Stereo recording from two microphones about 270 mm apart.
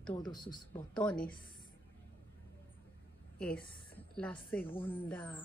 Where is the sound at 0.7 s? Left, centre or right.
Centre.